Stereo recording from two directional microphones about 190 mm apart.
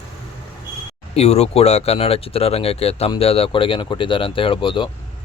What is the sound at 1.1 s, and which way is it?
Speech, 35° left (ahead or behind).